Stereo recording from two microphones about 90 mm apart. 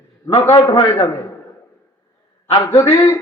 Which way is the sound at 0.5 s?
60° left (ahead or behind).